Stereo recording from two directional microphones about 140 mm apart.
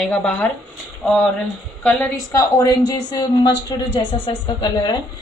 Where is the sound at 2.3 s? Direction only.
25° left (ahead or behind).